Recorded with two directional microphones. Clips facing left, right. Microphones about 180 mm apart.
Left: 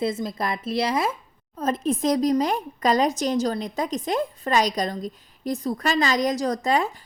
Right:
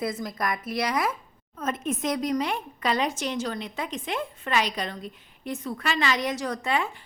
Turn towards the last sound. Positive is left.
turn(degrees=40)  # may be behind; listen again after turning